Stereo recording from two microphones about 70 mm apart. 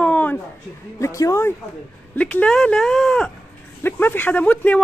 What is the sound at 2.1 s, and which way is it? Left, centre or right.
Speech, left.